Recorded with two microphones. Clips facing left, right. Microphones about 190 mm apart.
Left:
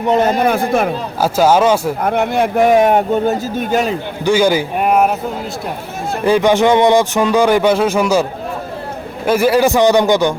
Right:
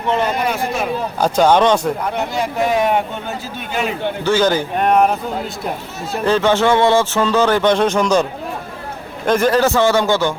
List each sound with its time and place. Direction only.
0.1 s speech: 45° left (ahead or behind)
1.2 s speech: 5° left (ahead or behind)
2.0 s speech: 55° left (ahead or behind)
4.2 s speech: 10° left (ahead or behind)
6.2 s speech: 15° left (ahead or behind)